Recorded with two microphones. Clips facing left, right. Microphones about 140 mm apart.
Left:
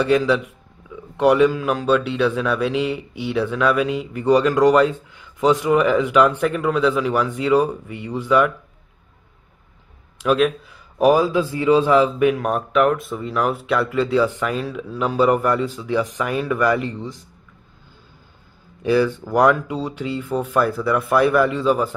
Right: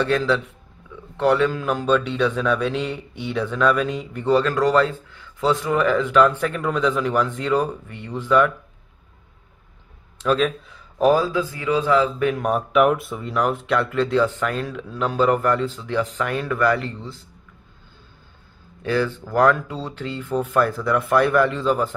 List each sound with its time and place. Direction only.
0.0 s speech: 10° left (ahead or behind)
10.1 s a man's voice: 10° left (ahead or behind)
11.3 s speech: 25° left (ahead or behind)
12.3 s speech: centre (ahead or behind)
18.8 s speech: 10° left (ahead or behind)